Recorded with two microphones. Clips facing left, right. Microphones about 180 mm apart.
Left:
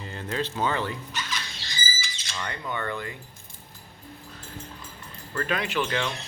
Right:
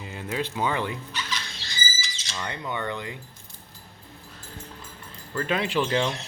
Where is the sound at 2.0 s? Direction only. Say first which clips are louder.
Even; 55° left (ahead or behind).